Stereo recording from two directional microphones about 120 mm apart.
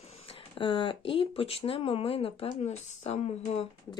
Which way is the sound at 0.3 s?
45° left (ahead or behind).